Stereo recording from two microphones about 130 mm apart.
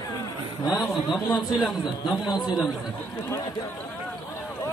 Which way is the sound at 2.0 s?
35° left (ahead or behind).